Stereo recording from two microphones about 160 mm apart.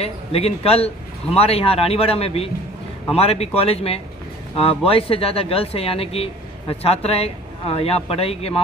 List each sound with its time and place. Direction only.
0.0 s speech: 40° left (ahead or behind)